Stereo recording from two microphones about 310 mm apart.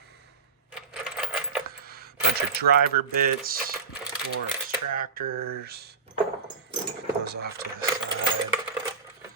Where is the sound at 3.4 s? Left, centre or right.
Right.